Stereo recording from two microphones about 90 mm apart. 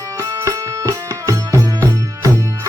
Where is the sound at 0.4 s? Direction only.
35° right (ahead or behind).